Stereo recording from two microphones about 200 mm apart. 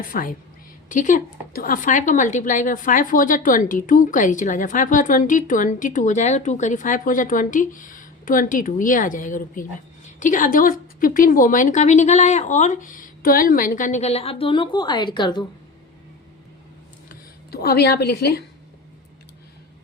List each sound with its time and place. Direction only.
0.0 s a woman's voice: 45° left (ahead or behind); by 15.4 s 20° left (ahead or behind)
17.1 s speech: 50° left (ahead or behind)